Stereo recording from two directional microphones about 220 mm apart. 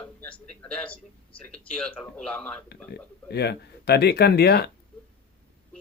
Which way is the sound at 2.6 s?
45° left (ahead or behind).